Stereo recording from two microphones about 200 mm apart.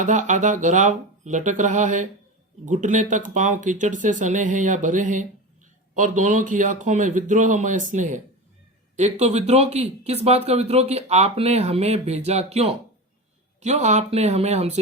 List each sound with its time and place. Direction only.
0.0 s speech: 35° right (ahead or behind)